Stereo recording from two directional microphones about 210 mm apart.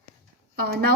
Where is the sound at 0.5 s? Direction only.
50° right (ahead or behind).